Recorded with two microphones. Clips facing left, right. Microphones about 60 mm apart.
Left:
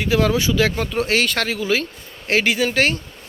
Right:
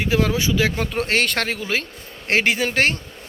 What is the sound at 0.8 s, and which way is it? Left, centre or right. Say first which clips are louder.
A man's voice: left 1 dB; right.